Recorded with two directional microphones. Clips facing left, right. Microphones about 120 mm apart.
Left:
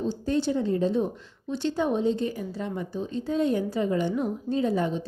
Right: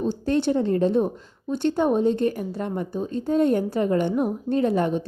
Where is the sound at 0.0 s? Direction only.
60° right (ahead or behind).